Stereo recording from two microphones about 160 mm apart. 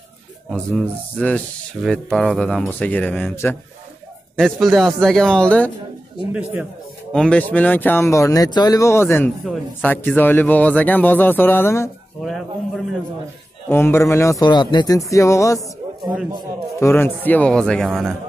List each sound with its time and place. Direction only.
0.7 s speech: 5° left (ahead or behind)
4.4 s speech: centre (ahead or behind)
7.1 s speech: 5° left (ahead or behind)
12.2 s speech: centre (ahead or behind)
13.7 s a man's voice: 15° left (ahead or behind)
15.6 s a sound: 5° right (ahead or behind)
16.8 s speech: 15° left (ahead or behind)